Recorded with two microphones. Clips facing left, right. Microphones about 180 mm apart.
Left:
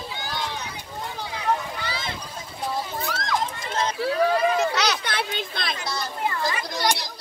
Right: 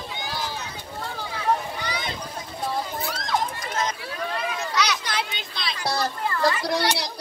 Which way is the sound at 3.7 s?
30° left (ahead or behind).